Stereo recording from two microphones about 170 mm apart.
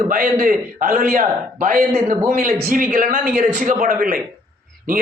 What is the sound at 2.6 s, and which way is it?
A man's voice, 55° right (ahead or behind).